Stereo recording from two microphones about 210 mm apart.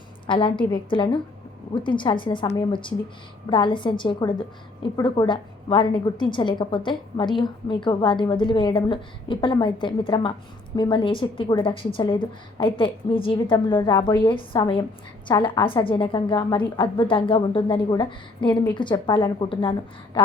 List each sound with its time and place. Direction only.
0.3 s a woman's voice: 25° left (ahead or behind)